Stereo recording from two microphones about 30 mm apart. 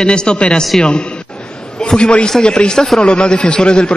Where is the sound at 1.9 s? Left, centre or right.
Left.